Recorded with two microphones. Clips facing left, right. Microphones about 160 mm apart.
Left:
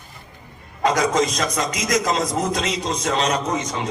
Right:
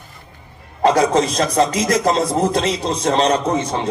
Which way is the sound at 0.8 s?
30° right (ahead or behind).